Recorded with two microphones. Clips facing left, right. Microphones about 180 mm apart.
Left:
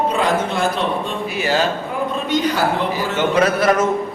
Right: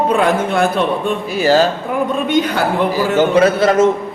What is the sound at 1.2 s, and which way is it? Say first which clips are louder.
Speech: right 7 dB; 40° right (ahead or behind).